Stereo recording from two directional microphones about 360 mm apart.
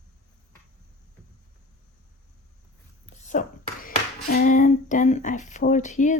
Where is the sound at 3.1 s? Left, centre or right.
Left.